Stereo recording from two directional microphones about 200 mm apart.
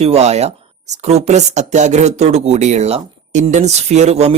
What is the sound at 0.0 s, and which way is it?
A woman's voice, 30° right (ahead or behind).